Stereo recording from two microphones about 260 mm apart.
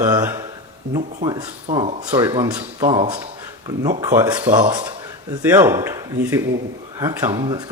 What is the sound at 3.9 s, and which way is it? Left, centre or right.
A man's voice, centre.